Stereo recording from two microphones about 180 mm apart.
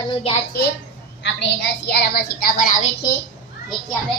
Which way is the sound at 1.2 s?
70° left (ahead or behind).